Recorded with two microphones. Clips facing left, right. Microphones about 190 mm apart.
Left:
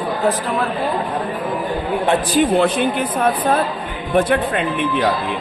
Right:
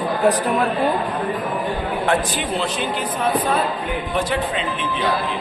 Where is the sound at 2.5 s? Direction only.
55° left (ahead or behind).